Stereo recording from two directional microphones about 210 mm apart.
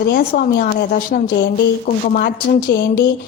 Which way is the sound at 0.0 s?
50° left (ahead or behind).